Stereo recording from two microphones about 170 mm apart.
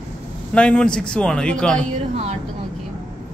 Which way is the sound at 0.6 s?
5° left (ahead or behind).